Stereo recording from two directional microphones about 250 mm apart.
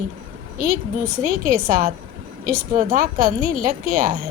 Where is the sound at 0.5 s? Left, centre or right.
Right.